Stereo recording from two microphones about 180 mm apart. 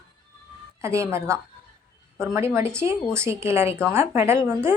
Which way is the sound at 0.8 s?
15° right (ahead or behind).